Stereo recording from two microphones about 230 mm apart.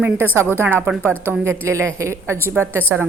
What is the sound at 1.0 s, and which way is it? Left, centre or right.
Speech, centre.